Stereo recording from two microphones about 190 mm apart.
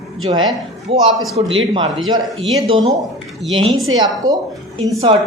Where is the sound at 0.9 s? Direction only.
30° right (ahead or behind).